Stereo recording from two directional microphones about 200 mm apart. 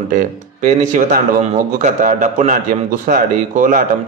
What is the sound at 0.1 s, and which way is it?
Speech, 40° right (ahead or behind).